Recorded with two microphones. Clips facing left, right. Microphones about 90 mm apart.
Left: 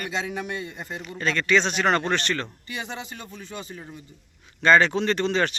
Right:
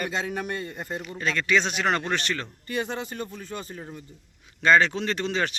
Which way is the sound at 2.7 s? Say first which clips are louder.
Right 9 dB; 50° right (ahead or behind).